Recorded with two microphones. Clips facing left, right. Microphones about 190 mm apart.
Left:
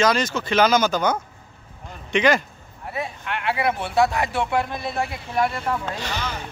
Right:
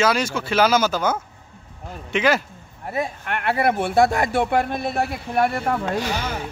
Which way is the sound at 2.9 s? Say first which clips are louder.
Right 3 dB; 50° right (ahead or behind).